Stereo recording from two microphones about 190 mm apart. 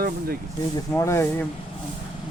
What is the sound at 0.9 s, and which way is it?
Speech, 15° left (ahead or behind).